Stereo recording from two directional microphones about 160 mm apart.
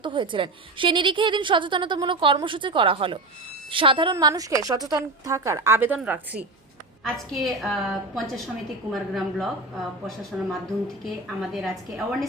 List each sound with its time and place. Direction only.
0.0 s a woman's voice: 30° right (ahead or behind); by 6.4 s 10° right (ahead or behind)
7.0 s a woman's voice: centre (ahead or behind)